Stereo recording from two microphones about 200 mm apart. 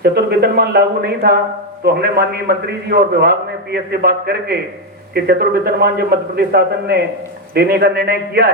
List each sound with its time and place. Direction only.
0.0 s a man's voice: 55° right (ahead or behind)